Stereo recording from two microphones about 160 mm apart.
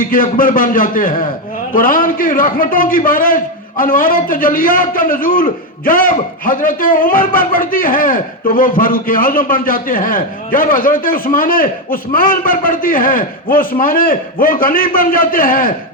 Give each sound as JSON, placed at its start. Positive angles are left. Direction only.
{"t": 0.0, "sound": "a man's voice", "side_deg": 60}